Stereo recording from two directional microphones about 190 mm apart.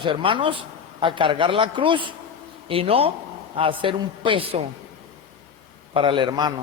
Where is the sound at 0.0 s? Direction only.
25° right (ahead or behind).